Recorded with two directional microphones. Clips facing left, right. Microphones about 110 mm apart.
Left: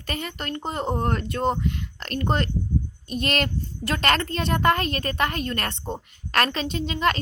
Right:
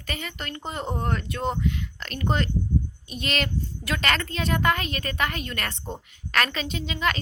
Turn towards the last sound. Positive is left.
turn(degrees=40)  # may be behind; listen again after turning